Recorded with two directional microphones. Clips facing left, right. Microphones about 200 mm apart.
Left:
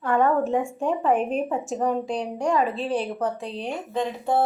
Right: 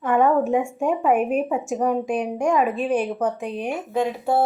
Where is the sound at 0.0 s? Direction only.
15° right (ahead or behind).